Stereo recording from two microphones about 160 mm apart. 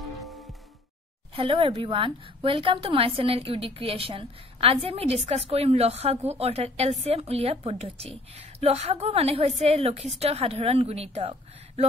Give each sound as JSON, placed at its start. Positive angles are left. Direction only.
{"t": 0.0, "sound": "music", "side_deg": 0}
{"t": 1.3, "sound": "a woman's voice", "side_deg": -35}